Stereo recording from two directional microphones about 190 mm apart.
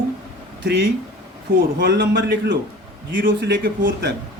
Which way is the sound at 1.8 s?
65° right (ahead or behind).